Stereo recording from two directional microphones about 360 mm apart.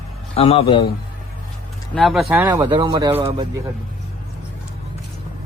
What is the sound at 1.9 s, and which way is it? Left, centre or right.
Speech, centre.